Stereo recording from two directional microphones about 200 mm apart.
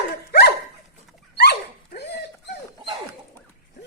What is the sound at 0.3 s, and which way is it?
Dog, 50° left (ahead or behind).